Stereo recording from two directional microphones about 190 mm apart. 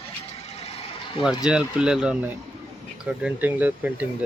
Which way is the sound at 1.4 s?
5° right (ahead or behind).